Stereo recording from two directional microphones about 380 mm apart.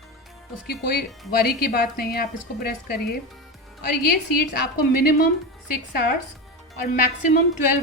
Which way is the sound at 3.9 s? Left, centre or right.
Left.